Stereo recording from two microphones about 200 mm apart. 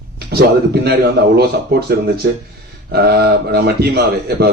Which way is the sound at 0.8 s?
55° right (ahead or behind).